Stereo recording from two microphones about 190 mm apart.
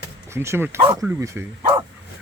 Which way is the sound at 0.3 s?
15° right (ahead or behind).